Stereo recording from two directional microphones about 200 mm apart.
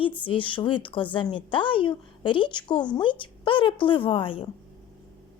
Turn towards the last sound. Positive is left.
turn(degrees=25)  # may be behind; listen again after turning